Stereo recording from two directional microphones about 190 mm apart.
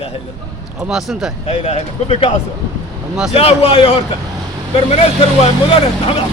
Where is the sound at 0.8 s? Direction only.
Centre (ahead or behind).